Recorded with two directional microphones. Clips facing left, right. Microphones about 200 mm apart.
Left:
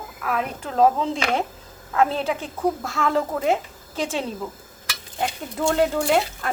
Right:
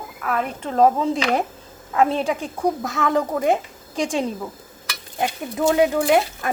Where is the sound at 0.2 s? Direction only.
Centre (ahead or behind).